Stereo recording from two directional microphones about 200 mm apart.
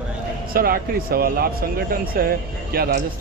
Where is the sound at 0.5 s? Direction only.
50° right (ahead or behind).